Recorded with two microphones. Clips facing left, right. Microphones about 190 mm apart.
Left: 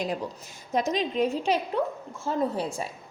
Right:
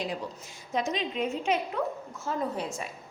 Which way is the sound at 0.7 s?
40° left (ahead or behind).